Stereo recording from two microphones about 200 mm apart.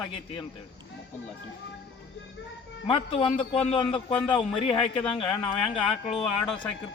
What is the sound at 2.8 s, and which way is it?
A man's voice, 25° left (ahead or behind).